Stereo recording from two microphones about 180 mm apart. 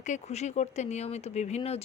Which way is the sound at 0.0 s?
40° left (ahead or behind).